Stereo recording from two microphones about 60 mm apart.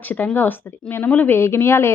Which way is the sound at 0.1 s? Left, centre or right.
Left.